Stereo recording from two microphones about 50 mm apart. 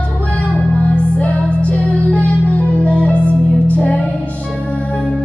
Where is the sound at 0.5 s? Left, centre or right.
Left.